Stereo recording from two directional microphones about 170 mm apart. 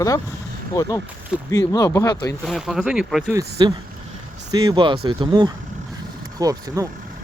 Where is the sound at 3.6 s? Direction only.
25° right (ahead or behind).